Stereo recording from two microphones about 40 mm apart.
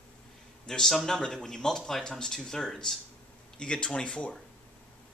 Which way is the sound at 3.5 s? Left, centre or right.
Left.